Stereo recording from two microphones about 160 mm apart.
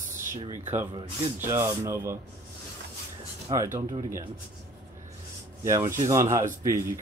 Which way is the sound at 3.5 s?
35° right (ahead or behind).